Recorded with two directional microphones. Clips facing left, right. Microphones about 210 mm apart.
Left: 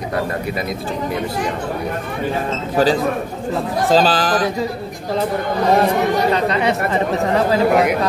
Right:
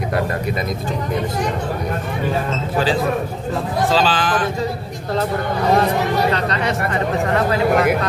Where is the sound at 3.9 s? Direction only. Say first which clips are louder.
Left 5 dB; 40° left (ahead or behind).